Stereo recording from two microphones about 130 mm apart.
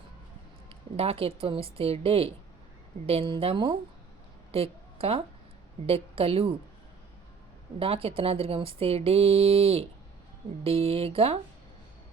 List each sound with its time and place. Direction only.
0.7 s a woman's voice: 45° right (ahead or behind)
7.8 s speech: 45° right (ahead or behind)